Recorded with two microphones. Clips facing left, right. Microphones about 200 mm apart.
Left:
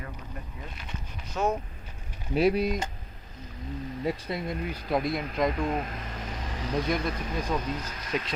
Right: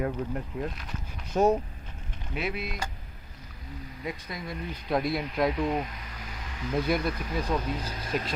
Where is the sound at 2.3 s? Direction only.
35° left (ahead or behind).